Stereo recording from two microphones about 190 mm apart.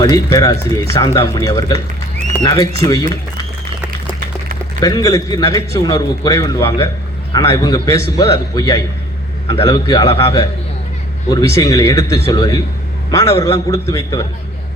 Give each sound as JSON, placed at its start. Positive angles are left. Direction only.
{"t": 0.0, "sound": "a man's voice", "side_deg": 20}
{"t": 4.8, "sound": "a man's voice", "side_deg": 20}